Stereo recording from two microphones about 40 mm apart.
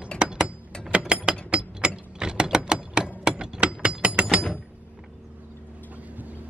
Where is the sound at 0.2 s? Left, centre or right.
Right.